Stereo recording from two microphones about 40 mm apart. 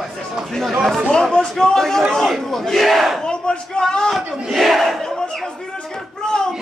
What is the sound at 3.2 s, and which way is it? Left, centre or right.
Battle cry, left.